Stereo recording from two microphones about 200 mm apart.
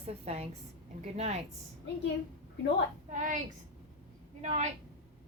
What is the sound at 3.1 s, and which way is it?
Speech, 40° right (ahead or behind).